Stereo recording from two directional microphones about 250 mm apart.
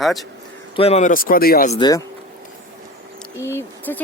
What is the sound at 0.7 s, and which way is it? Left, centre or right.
Speech, left.